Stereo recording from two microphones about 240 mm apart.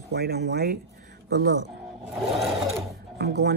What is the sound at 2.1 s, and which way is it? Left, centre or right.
Vehicle, centre.